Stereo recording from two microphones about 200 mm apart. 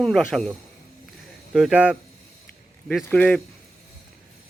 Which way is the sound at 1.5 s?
5° right (ahead or behind).